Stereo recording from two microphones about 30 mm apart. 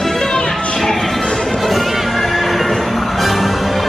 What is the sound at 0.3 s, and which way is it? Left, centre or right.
Music, left.